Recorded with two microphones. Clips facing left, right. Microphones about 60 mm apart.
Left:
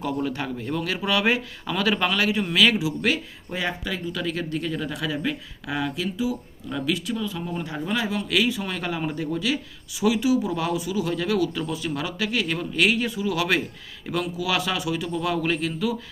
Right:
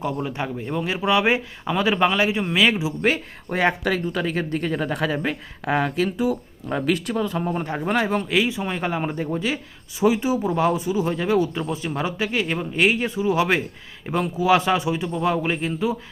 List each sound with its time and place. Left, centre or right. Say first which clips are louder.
0.0 s speech: right 1 dB; centre
3.5 s speech: right 7 dB; right
4.0 s speech: right 4 dB; right
8.3 s speech: right 2 dB; right